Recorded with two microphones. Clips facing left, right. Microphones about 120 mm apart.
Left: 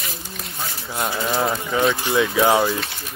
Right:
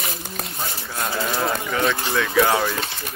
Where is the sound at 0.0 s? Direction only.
60° right (ahead or behind).